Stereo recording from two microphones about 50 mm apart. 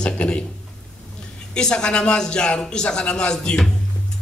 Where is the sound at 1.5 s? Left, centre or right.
Centre.